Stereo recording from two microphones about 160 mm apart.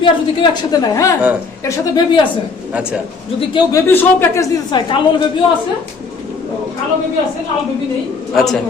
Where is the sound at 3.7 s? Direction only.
20° left (ahead or behind).